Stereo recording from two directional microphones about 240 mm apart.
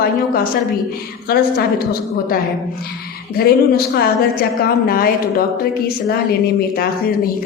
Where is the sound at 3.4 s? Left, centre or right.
Left.